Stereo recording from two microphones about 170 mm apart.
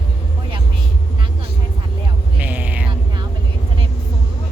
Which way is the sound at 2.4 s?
10° right (ahead or behind).